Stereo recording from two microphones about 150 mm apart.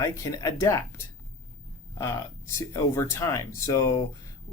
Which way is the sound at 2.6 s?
20° left (ahead or behind).